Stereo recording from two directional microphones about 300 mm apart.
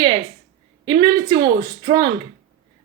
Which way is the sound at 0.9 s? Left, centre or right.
Centre.